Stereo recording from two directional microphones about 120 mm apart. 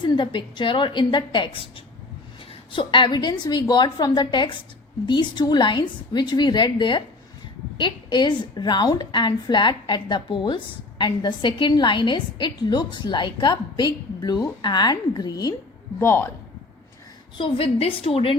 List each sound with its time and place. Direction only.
0.0 s a woman's voice: 40° left (ahead or behind)
2.7 s a woman's voice: 45° left (ahead or behind)
16.0 s a man's voice: 20° left (ahead or behind)
17.3 s a woman's voice: 50° left (ahead or behind)